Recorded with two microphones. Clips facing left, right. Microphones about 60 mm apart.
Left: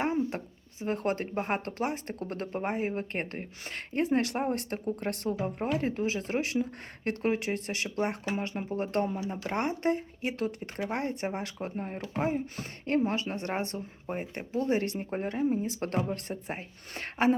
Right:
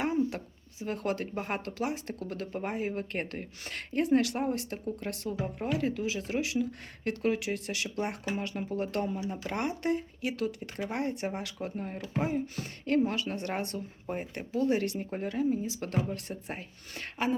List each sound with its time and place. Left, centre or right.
0.0 s speech: left
5.3 s speech: left
16.3 s speech: left
17.0 s speech: left